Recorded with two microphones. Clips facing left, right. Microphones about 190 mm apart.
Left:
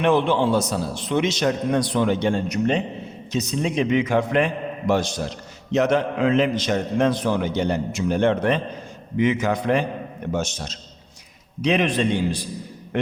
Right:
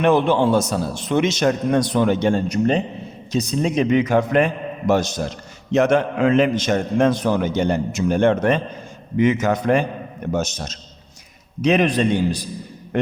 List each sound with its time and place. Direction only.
0.0 s a man's voice: 45° right (ahead or behind)